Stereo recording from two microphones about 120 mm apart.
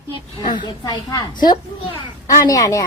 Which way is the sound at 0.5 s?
35° left (ahead or behind).